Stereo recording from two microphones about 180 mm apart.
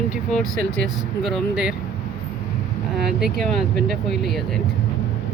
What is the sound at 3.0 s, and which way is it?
Speech, centre (ahead or behind).